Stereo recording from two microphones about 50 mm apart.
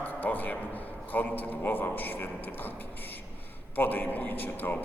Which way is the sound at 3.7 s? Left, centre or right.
Left.